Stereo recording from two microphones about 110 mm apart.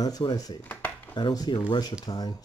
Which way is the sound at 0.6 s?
15° left (ahead or behind).